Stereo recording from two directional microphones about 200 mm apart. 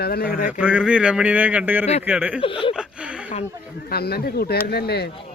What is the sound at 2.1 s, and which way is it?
Speech, 10° right (ahead or behind).